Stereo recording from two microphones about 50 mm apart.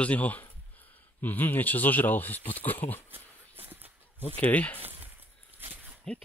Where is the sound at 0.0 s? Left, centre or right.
Left.